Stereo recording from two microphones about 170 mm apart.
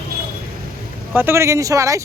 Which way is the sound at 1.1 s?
15° right (ahead or behind).